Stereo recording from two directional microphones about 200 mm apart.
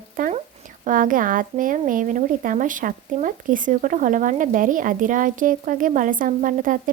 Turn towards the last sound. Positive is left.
turn(degrees=-40)  # may be behind; listen again after turning